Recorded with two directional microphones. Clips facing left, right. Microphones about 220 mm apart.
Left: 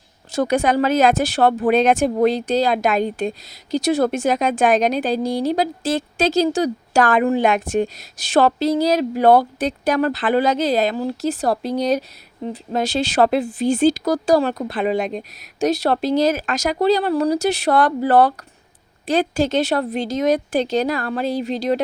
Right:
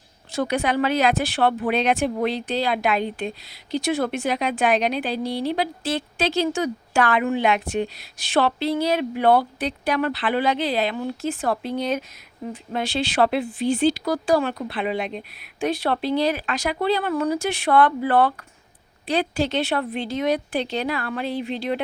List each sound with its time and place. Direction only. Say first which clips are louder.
0.3 s speech: left 5 dB; 45° left (ahead or behind)